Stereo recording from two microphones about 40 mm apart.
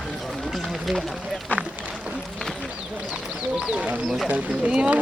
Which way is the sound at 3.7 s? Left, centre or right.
Right.